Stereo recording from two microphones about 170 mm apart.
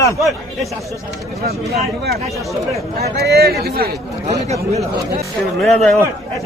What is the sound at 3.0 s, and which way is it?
Speech, 70° right (ahead or behind).